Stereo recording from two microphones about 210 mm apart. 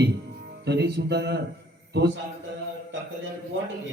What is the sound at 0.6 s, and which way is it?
Speech, 50° right (ahead or behind).